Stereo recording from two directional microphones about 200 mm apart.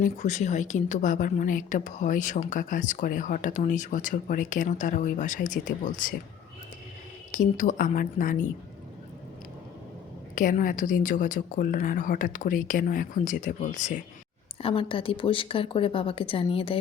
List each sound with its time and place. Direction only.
0.0 s a woman's voice: 35° left (ahead or behind)
7.3 s a woman's voice: 40° left (ahead or behind)
10.3 s a woman's voice: 40° left (ahead or behind)
14.6 s speech: 25° left (ahead or behind)